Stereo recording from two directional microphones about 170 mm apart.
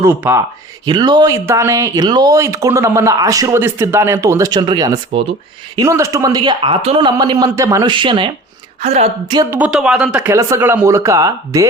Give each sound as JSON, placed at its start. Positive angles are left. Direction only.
{"t": 0.0, "sound": "speech", "side_deg": -15}
{"t": 0.9, "sound": "a woman's voice", "side_deg": -25}
{"t": 9.2, "sound": "speech", "side_deg": -25}
{"t": 9.5, "sound": "speech", "side_deg": -5}